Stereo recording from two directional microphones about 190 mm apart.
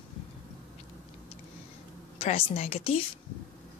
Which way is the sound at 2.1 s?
30° left (ahead or behind).